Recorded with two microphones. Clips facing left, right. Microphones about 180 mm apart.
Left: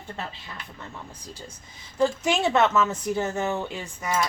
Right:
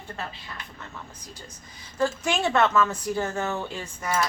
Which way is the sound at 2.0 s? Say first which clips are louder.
Left 3 dB; 20° left (ahead or behind).